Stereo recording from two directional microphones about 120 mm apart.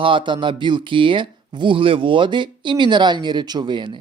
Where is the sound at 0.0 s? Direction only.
45° right (ahead or behind).